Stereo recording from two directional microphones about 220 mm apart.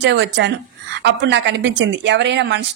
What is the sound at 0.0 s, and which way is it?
A woman's voice, 55° right (ahead or behind).